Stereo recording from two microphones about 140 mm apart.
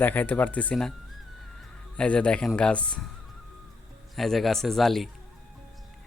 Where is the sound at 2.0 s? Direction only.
5° left (ahead or behind).